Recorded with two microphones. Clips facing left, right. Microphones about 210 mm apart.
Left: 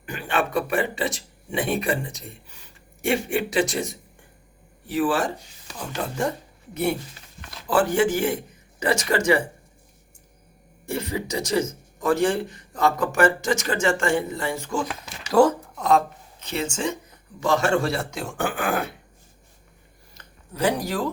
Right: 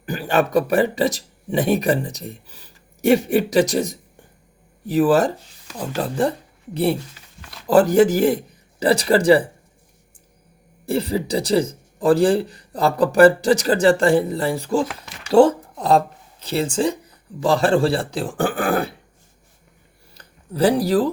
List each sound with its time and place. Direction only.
0.0 s speech: 35° right (ahead or behind)
7.7 s speech: 40° right (ahead or behind)
10.8 s speech: 35° right (ahead or behind)
20.1 s a sound: 35° right (ahead or behind)